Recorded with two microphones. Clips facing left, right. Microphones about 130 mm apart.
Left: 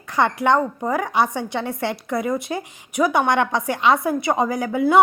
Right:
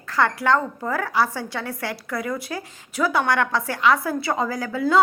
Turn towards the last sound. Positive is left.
turn(degrees=20)  # may be behind; listen again after turning